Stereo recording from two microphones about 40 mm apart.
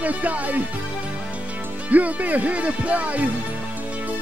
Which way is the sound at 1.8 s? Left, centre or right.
Right.